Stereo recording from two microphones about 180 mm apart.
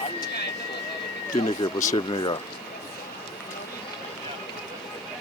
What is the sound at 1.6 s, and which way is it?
Speech, 20° left (ahead or behind).